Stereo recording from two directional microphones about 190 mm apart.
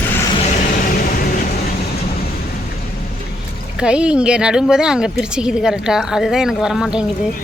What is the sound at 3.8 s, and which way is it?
A woman's voice, 5° right (ahead or behind).